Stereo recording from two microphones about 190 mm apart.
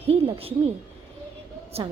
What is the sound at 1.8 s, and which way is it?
Speech, 35° right (ahead or behind).